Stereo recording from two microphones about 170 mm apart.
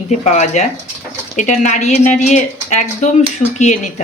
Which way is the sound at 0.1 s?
45° left (ahead or behind).